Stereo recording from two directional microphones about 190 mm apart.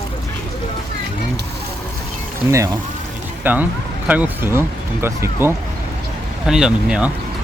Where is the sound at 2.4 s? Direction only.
15° right (ahead or behind).